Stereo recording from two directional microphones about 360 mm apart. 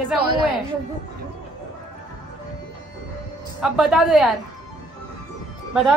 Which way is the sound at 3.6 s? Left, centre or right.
Centre.